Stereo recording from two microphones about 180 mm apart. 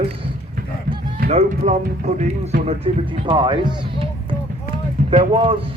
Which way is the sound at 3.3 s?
25° right (ahead or behind).